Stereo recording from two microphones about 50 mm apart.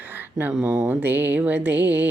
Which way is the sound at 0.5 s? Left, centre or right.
Centre.